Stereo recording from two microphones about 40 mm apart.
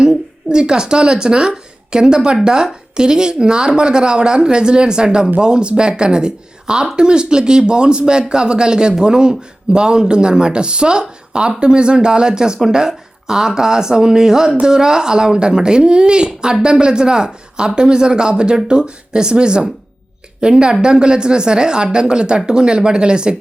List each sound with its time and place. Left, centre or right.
0.0 s speech: right